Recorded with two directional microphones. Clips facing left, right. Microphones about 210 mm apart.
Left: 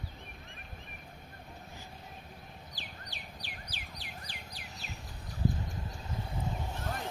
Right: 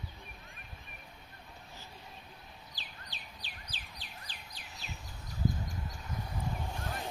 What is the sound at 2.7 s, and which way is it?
Bird, 15° left (ahead or behind).